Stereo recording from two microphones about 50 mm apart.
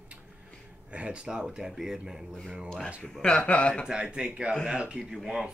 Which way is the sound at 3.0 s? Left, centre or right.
Centre.